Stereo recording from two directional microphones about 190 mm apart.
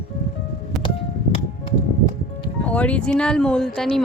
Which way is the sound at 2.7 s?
5° left (ahead or behind).